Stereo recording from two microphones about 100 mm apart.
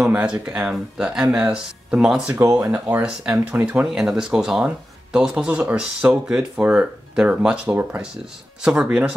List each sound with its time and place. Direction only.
0.0 s speech: 10° right (ahead or behind)
7.6 s speech: 20° right (ahead or behind)
8.6 s speech: 10° right (ahead or behind)